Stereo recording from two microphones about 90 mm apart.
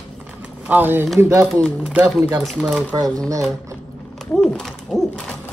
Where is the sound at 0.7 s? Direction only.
20° right (ahead or behind).